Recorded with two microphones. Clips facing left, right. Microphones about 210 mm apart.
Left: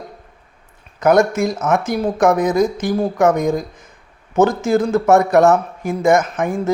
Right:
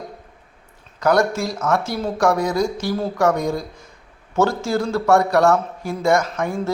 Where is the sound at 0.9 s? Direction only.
20° left (ahead or behind).